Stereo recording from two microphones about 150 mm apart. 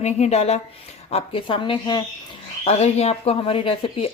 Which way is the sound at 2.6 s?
45° left (ahead or behind).